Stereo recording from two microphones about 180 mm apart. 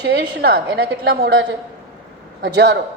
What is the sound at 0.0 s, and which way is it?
A woman's voice, 65° right (ahead or behind).